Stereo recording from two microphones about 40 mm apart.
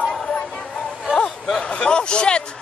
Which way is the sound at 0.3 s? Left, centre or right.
Left.